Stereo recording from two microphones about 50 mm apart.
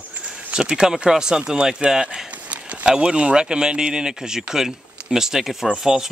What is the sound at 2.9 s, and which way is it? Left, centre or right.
Speech, right.